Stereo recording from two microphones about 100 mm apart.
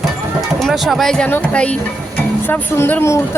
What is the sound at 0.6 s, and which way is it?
Speech, centre (ahead or behind).